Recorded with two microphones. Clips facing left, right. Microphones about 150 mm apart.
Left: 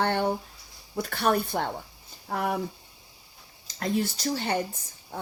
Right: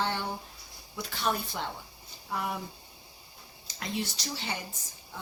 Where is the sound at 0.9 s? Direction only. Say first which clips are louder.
Left 7 dB; 55° left (ahead or behind).